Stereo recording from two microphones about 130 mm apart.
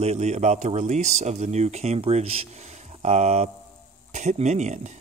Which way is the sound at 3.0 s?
60° right (ahead or behind).